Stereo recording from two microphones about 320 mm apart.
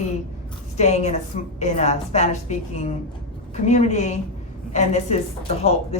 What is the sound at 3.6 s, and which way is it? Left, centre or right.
A woman's voice, left.